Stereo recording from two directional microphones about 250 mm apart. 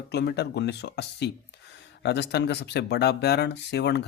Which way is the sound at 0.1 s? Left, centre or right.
Left.